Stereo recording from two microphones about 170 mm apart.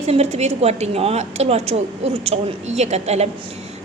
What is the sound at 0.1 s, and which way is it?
A woman's voice, 40° right (ahead or behind).